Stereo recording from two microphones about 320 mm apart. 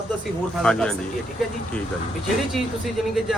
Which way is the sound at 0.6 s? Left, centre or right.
Centre.